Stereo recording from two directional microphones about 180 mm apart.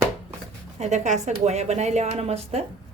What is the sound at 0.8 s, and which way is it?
Speech, 40° right (ahead or behind).